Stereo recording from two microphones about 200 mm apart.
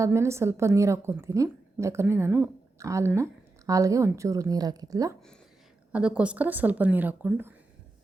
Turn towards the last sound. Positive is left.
turn(degrees=-10)  # may be behind; listen again after turning